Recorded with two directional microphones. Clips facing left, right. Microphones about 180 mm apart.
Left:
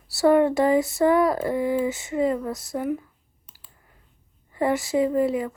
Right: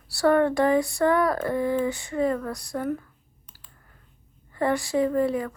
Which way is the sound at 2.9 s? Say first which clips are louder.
Left 2 dB; 15° left (ahead or behind).